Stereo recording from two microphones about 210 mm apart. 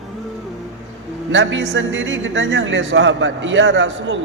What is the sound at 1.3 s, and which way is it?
A man's voice, 65° right (ahead or behind).